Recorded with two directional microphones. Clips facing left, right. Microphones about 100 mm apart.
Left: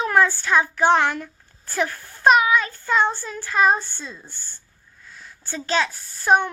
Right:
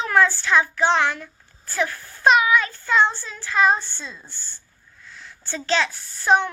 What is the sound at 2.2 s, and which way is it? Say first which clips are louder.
Child singing: left 1 dB; 35° left (ahead or behind).